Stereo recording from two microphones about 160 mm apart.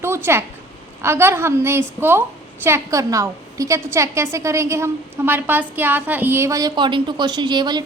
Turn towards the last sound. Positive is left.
turn(degrees=-25)  # may be behind; listen again after turning